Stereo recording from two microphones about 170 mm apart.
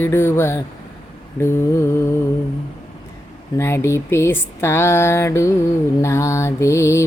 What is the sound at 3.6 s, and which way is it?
Mantra, 15° left (ahead or behind).